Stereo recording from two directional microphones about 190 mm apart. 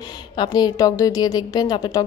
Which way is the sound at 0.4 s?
20° left (ahead or behind).